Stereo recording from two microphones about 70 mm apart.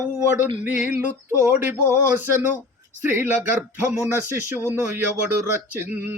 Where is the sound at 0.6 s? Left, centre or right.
Right.